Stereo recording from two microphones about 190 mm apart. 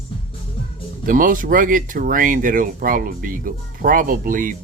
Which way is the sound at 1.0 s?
45° right (ahead or behind).